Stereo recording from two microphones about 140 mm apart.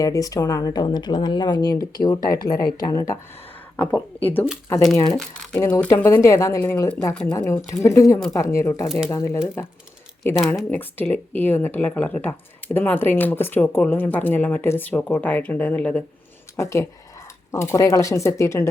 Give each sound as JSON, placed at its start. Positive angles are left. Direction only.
{"t": 0.0, "sound": "speech", "side_deg": 25}
{"t": 3.8, "sound": "speech", "side_deg": 10}
{"t": 5.5, "sound": "speech", "side_deg": 20}
{"t": 7.7, "sound": "speech", "side_deg": 20}
{"t": 10.7, "sound": "speech", "side_deg": 15}
{"t": 16.6, "sound": "speech", "side_deg": 20}